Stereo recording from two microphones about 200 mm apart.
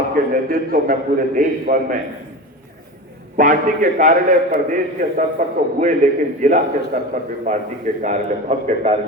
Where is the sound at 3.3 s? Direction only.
40° right (ahead or behind).